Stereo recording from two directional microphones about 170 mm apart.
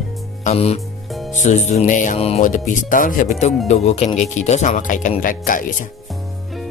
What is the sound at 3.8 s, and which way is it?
Speech, 40° left (ahead or behind).